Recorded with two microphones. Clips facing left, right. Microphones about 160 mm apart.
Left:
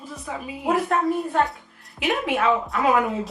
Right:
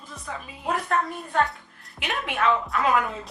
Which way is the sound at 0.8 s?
25° left (ahead or behind).